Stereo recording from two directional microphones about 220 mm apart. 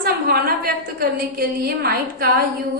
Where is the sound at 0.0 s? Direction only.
40° right (ahead or behind).